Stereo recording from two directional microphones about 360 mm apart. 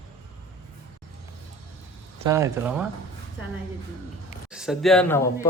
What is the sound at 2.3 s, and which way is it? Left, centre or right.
Speech, centre.